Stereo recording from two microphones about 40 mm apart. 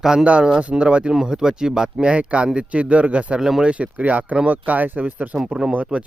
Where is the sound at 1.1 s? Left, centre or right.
Centre; by 3.4 s right.